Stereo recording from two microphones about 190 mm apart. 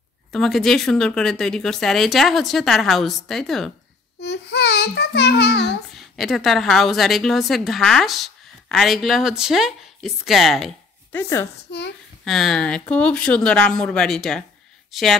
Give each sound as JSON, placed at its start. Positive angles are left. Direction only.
{"t": 0.3, "sound": "speech", "side_deg": 0}
{"t": 4.2, "sound": "child singing", "side_deg": 60}
{"t": 5.9, "sound": "speech", "side_deg": 0}
{"t": 11.1, "sound": "speech", "side_deg": 15}
{"t": 11.7, "sound": "child singing", "side_deg": 65}
{"t": 12.3, "sound": "speech", "side_deg": 0}